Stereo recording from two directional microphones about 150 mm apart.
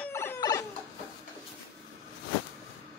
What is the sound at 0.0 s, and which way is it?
Chicken, 15° left (ahead or behind).